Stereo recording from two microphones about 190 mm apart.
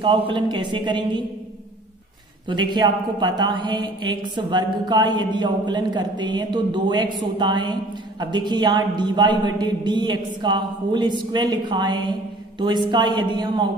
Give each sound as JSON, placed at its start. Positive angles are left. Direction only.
{"t": 0.0, "sound": "a man's voice", "side_deg": -25}
{"t": 2.4, "sound": "a man's voice", "side_deg": -25}